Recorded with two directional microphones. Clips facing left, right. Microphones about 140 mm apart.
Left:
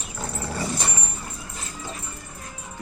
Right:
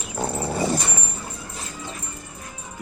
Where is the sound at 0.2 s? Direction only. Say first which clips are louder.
Right 6 dB; 20° right (ahead or behind).